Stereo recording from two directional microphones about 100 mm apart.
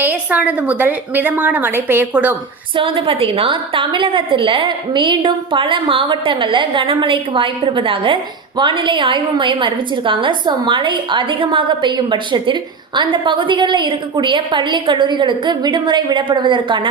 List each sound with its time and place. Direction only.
0.0 s a woman's voice: 15° right (ahead or behind)
2.7 s a woman's voice: 65° right (ahead or behind)